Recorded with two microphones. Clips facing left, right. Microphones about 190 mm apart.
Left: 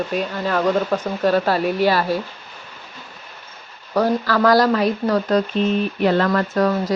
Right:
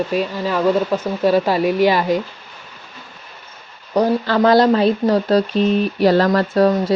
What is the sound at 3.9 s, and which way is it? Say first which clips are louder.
Speech: right 2 dB; 20° right (ahead or behind).